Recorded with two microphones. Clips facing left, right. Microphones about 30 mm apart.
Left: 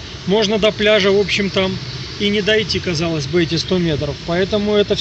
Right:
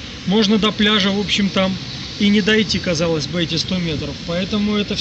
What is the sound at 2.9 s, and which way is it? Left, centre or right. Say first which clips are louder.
Speech: right 4 dB; left.